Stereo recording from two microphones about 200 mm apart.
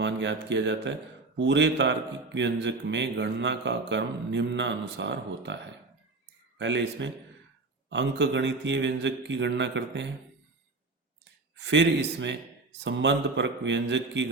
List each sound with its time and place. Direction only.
0.0 s speech: 60° right (ahead or behind)
6.6 s speech: 65° right (ahead or behind)
11.6 s speech: 60° right (ahead or behind)